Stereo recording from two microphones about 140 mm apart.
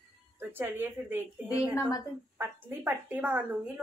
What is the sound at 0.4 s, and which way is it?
A woman's voice, 15° right (ahead or behind).